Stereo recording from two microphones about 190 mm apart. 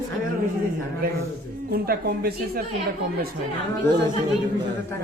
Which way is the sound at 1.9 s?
55° right (ahead or behind).